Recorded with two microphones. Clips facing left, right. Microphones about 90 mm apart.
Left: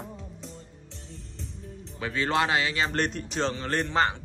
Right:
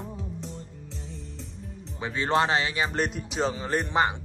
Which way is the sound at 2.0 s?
20° right (ahead or behind).